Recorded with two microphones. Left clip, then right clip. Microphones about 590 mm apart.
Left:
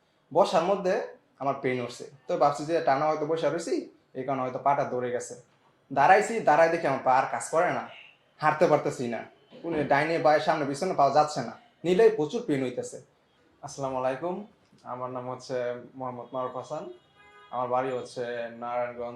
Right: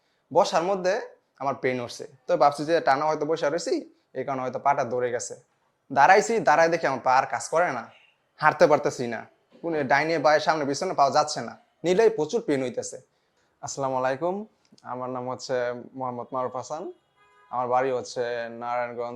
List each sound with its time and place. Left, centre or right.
0.3 s speech: right
13.6 s speech: right